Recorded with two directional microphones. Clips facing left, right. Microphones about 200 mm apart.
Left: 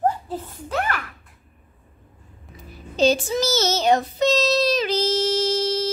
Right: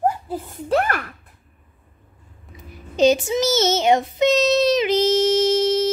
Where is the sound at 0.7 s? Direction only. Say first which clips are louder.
Right 6 dB; 35° right (ahead or behind).